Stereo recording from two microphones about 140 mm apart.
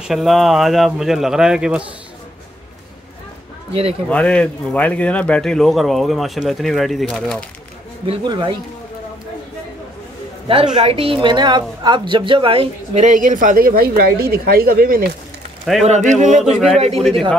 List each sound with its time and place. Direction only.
0.0 s a man's voice: centre (ahead or behind)
4.1 s a man's voice: 10° left (ahead or behind)
8.1 s a woman's voice: 35° right (ahead or behind)
10.5 s a woman's voice: 40° right (ahead or behind); by 15.0 s 90° right
15.8 s a man's voice: 55° right (ahead or behind)
16.7 s speech: 50° right (ahead or behind)